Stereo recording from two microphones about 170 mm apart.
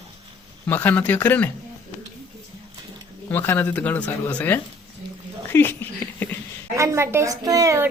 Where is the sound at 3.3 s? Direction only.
10° left (ahead or behind).